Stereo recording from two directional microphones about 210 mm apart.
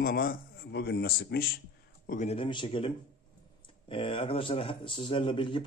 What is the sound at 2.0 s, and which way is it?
Speech, 35° left (ahead or behind).